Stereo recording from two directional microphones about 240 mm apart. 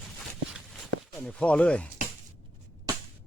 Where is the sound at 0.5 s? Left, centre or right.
Centre.